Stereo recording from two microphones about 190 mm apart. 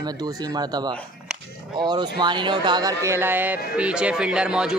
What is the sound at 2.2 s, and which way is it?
Speech, 25° right (ahead or behind).